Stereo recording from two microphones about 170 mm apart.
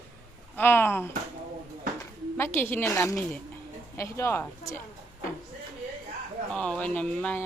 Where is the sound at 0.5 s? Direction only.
10° left (ahead or behind).